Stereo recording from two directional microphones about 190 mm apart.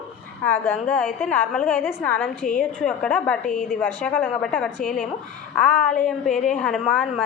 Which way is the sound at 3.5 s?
45° left (ahead or behind).